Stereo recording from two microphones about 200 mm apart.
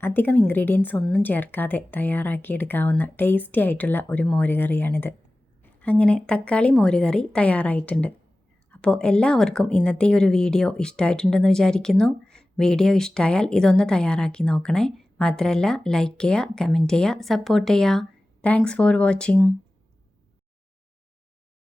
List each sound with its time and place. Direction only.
0.0 s a woman's voice: 10° left (ahead or behind)